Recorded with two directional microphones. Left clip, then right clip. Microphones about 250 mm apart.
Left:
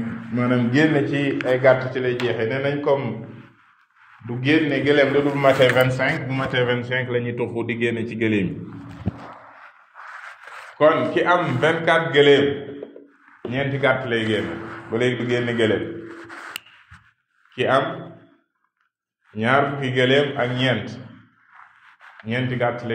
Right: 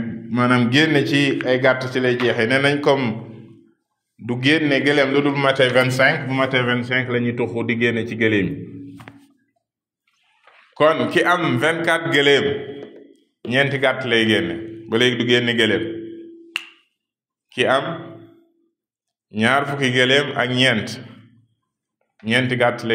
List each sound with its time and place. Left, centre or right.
0.3 s a man's voice: right
4.3 s a man's voice: right
10.8 s a man's voice: right
13.5 s a man's voice: right
16.5 s finger snapping: left
17.6 s a man's voice: right
19.3 s a man's voice: right
22.2 s a man's voice: right